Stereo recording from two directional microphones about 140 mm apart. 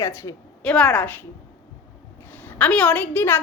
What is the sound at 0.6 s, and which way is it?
Speech, 5° left (ahead or behind).